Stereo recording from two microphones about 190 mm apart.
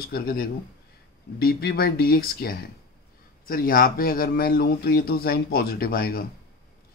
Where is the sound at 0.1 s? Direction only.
50° left (ahead or behind).